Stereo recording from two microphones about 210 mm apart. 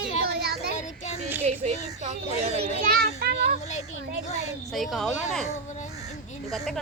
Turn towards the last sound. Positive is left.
turn(degrees=0)  # may be behind; listen again after turning